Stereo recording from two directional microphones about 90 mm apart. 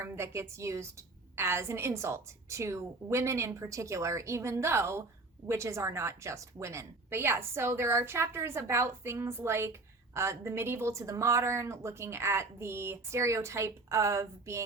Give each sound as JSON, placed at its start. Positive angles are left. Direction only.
{"t": 0.0, "sound": "a woman's voice", "side_deg": -30}